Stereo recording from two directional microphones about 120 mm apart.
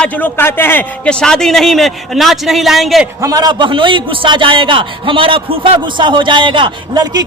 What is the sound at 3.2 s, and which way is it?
A man's voice, 30° right (ahead or behind).